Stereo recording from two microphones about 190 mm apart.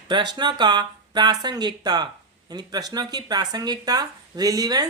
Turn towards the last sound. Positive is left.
turn(degrees=-20)  # may be behind; listen again after turning